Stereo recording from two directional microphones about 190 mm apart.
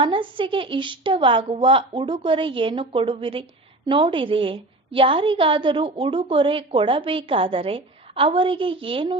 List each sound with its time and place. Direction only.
0.0 s a woman's voice: 25° right (ahead or behind)